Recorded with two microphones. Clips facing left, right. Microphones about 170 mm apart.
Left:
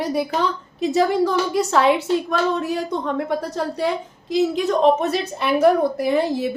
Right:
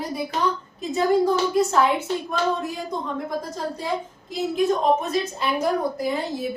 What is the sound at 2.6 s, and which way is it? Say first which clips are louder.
A woman's voice: left 5 dB; 75° left (ahead or behind).